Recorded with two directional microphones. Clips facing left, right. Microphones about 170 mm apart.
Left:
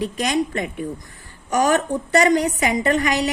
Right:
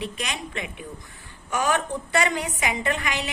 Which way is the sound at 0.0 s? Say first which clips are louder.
Left 10 dB; 40° left (ahead or behind).